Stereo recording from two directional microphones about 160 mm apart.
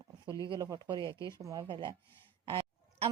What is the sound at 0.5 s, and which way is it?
Speech, 25° right (ahead or behind).